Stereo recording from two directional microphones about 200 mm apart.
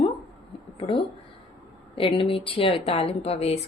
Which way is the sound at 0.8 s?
25° left (ahead or behind).